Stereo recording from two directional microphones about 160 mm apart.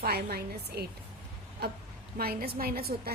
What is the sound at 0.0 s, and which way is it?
A woman's voice, 75° right (ahead or behind).